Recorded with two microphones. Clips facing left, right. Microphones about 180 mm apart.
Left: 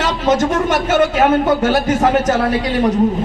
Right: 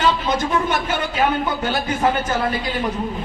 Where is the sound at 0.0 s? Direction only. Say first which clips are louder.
Left 4 dB; 90° left.